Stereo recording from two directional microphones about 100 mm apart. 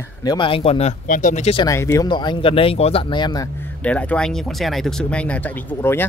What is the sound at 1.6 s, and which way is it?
Speech, 30° left (ahead or behind).